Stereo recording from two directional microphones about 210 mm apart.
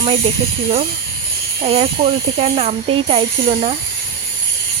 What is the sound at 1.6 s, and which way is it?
Speech, 30° right (ahead or behind).